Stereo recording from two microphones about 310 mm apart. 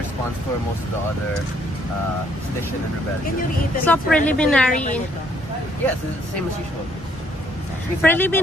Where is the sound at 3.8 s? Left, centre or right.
Centre.